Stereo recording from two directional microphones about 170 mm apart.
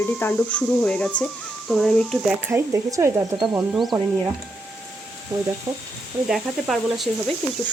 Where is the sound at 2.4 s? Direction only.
15° right (ahead or behind).